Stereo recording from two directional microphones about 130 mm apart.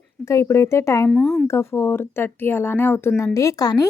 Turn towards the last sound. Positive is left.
turn(degrees=30)  # may be behind; listen again after turning